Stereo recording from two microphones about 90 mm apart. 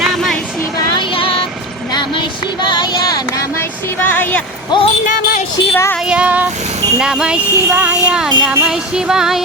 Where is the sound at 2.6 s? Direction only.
55° left (ahead or behind).